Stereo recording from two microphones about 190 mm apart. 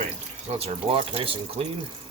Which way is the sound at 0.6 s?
30° right (ahead or behind).